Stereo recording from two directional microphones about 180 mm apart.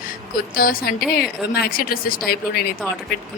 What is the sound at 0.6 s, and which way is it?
Speech, 55° left (ahead or behind).